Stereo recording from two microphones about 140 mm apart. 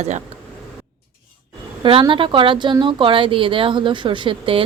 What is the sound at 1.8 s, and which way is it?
A woman's voice, 40° right (ahead or behind).